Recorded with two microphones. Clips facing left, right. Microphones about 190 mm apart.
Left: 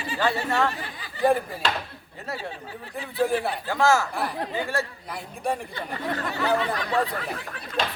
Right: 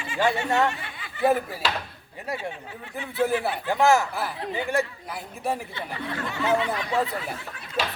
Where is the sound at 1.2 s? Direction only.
5° right (ahead or behind).